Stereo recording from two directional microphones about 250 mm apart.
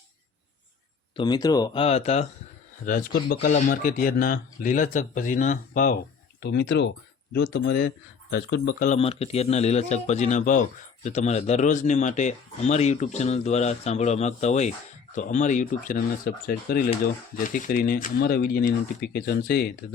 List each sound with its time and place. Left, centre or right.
1.1 s a man's voice: centre; by 8.9 s left
8.9 s a man's voice: left